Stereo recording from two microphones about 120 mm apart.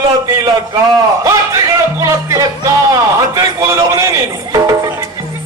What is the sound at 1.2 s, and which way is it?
Music, 25° right (ahead or behind).